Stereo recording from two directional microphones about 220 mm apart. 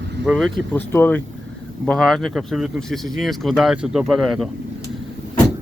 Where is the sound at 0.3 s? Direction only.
Centre (ahead or behind).